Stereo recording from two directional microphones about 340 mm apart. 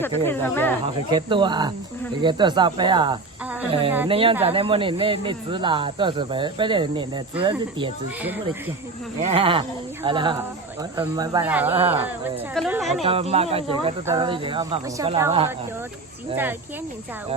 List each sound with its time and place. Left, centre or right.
0.0 s speech: centre
1.1 s speech: centre
9.2 s speech: centre
13.0 s speech: centre